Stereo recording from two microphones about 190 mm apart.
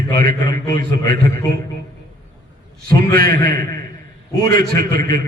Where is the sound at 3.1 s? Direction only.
55° right (ahead or behind).